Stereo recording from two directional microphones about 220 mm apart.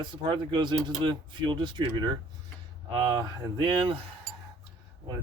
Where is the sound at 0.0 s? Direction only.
20° right (ahead or behind).